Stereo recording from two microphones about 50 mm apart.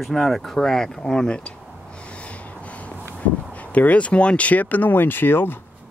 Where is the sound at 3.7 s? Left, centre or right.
Left.